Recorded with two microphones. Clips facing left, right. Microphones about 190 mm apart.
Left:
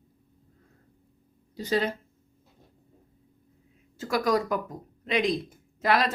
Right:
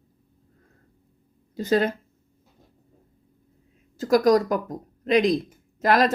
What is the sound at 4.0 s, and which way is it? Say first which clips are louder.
A woman's voice: right 7 dB; 40° right (ahead or behind).